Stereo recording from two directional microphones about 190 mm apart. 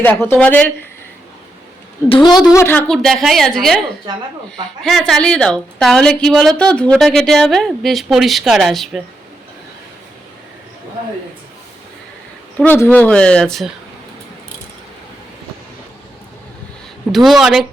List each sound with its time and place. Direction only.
0.0 s speech: 10° left (ahead or behind)
2.0 s a woman's voice: 25° left (ahead or behind)
2.5 s a woman's voice: 15° left (ahead or behind)
4.8 s a woman's voice: centre (ahead or behind)
12.5 s speech: 10° left (ahead or behind)
17.1 s a woman's voice: centre (ahead or behind)